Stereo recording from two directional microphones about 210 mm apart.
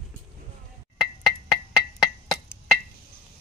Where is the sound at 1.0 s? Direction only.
Centre (ahead or behind).